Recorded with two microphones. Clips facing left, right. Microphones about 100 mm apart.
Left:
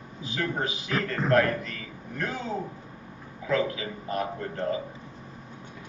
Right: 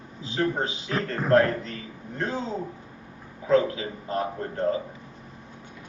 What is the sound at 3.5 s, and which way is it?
A man's voice, 35° right (ahead or behind).